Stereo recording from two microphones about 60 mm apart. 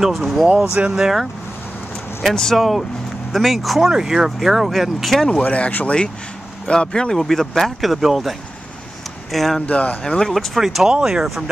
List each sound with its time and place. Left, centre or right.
0.0 s speech: centre
2.2 s speech: centre
5.3 s speech: left
6.7 s speech: centre
9.7 s speech: left
10.3 s speech: centre
10.9 s speech: centre